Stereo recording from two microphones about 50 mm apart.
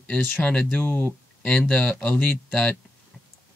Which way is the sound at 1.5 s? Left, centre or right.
Left.